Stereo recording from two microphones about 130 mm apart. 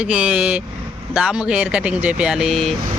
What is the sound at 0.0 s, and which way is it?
Speech, 10° right (ahead or behind).